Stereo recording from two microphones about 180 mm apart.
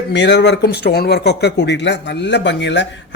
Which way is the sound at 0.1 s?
75° left (ahead or behind).